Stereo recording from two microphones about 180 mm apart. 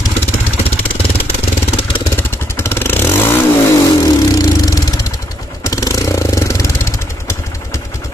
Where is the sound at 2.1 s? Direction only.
15° left (ahead or behind).